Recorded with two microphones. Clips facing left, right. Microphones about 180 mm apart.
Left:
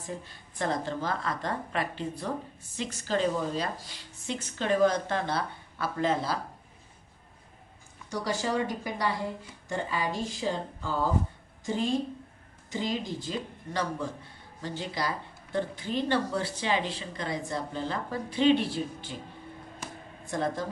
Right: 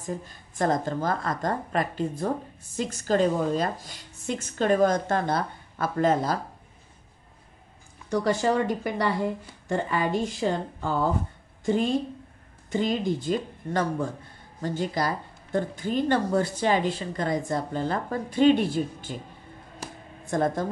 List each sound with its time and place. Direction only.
0.0 s a woman's voice: 45° right (ahead or behind)
8.1 s speech: 55° right (ahead or behind)
12.6 s a woman's voice: 55° right (ahead or behind)
20.2 s a woman's voice: 50° right (ahead or behind)